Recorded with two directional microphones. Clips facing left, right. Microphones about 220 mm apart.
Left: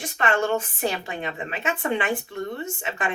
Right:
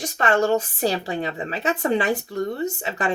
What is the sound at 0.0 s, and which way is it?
A woman's voice, 40° right (ahead or behind).